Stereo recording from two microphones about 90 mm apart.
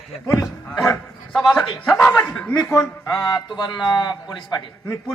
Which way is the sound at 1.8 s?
25° left (ahead or behind).